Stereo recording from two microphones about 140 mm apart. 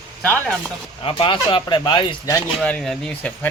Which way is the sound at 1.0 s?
40° left (ahead or behind).